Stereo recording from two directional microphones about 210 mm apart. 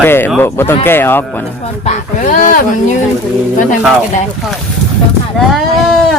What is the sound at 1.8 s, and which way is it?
Speech, 35° left (ahead or behind).